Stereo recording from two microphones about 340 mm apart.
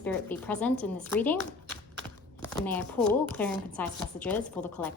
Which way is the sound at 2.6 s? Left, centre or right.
Centre.